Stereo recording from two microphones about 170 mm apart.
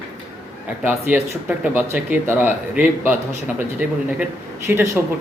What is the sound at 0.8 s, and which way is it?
Speech, 10° right (ahead or behind).